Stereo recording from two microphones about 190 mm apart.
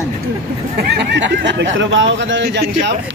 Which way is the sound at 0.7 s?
70° right (ahead or behind).